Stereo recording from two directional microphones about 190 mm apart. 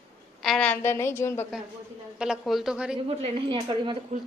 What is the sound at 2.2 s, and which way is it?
Speech, centre (ahead or behind).